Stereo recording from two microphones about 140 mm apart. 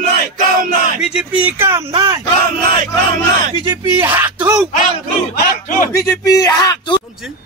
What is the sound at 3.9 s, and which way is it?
Speech, 15° right (ahead or behind).